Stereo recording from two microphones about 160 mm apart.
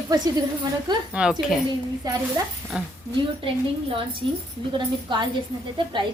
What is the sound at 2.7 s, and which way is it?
Speech, 5° right (ahead or behind).